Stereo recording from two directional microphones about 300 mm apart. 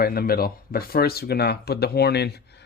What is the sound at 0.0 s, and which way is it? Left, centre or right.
Speech, left.